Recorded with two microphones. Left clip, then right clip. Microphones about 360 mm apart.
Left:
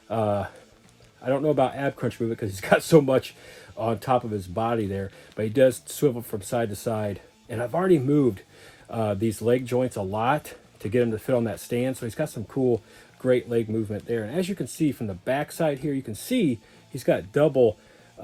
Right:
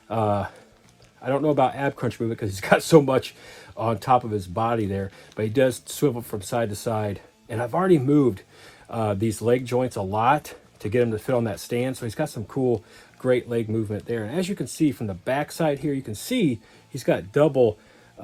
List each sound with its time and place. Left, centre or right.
0.1 s speech: centre
12.5 s speech: right
13.2 s speech: centre
17.5 s speech: right